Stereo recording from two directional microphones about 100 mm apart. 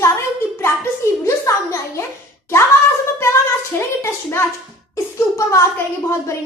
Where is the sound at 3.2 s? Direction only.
25° left (ahead or behind).